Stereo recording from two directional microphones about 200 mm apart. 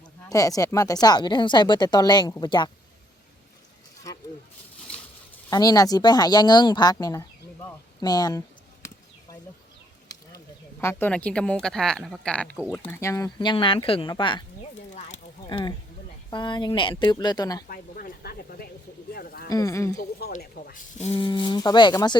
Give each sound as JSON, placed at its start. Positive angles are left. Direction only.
{"t": 0.3, "sound": "a woman's voice", "side_deg": 15}
{"t": 4.1, "sound": "a sound", "side_deg": 15}
{"t": 5.5, "sound": "speech", "side_deg": 20}
{"t": 10.1, "sound": "a woman's voice", "side_deg": 15}
{"t": 15.4, "sound": "a woman's voice", "side_deg": 25}
{"t": 17.7, "sound": "speech", "side_deg": 45}
{"t": 19.1, "sound": "a sound", "side_deg": 50}
{"t": 19.5, "sound": "speech", "side_deg": 15}
{"t": 20.0, "sound": "speech", "side_deg": 45}
{"t": 21.0, "sound": "a woman's voice", "side_deg": 30}